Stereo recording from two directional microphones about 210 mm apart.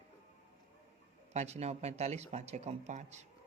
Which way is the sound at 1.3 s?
30° right (ahead or behind).